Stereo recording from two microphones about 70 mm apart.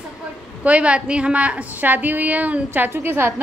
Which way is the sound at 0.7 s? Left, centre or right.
Centre.